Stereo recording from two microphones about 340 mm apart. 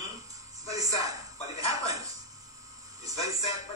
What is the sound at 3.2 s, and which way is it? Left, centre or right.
Speech, centre.